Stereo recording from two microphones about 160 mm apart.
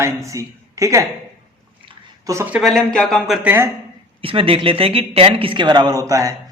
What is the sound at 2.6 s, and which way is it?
Speech, centre (ahead or behind).